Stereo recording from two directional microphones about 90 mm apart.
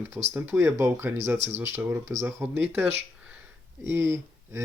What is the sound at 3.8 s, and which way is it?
Speech, 30° right (ahead or behind).